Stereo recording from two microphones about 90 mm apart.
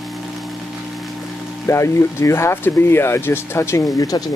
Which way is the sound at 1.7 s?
30° left (ahead or behind).